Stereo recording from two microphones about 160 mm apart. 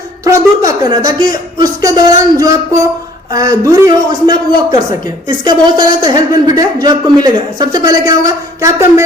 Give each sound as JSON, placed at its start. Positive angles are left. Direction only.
{"t": 0.3, "sound": "a woman's voice", "side_deg": -20}